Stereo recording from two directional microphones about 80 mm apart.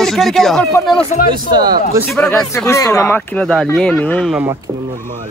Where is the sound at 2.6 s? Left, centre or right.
Left.